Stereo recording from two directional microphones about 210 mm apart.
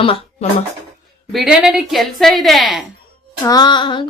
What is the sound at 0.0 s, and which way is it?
Speech, 25° left (ahead or behind).